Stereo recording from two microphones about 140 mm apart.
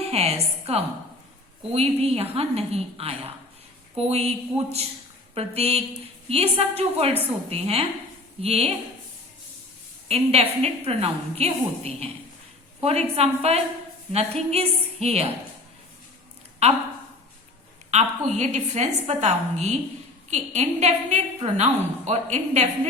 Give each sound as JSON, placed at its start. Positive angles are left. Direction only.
{"t": 0.0, "sound": "a woman's voice", "side_deg": -45}
{"t": 10.1, "sound": "a woman's voice", "side_deg": -45}
{"t": 17.9, "sound": "a woman's voice", "side_deg": -55}